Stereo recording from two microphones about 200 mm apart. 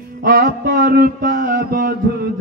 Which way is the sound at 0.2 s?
45° right (ahead or behind).